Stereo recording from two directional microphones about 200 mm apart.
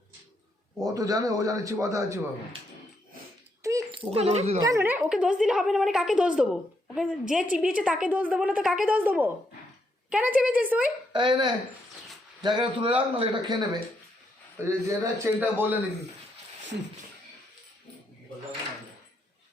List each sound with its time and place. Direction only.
0.9 s a man's voice: 15° right (ahead or behind)
3.6 s a sound: 15° right (ahead or behind)
4.1 s speech: 35° right (ahead or behind)
4.6 s a woman's voice: 15° right (ahead or behind)
11.1 s a man's voice: 25° right (ahead or behind)
14.7 s a man's voice: 15° right (ahead or behind)